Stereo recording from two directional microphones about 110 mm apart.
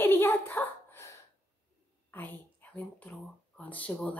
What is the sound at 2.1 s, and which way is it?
A woman's voice, 15° left (ahead or behind).